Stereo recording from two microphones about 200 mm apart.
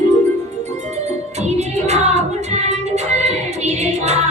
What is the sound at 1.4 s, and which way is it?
Music, 35° right (ahead or behind).